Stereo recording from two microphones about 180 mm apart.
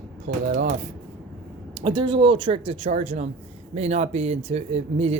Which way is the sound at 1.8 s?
25° right (ahead or behind).